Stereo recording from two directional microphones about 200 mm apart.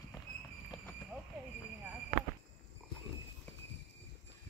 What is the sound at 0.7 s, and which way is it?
Clip-clop, 20° left (ahead or behind).